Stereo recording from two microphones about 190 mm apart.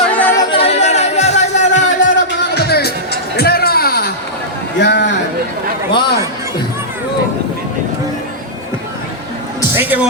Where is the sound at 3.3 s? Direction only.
55° left (ahead or behind).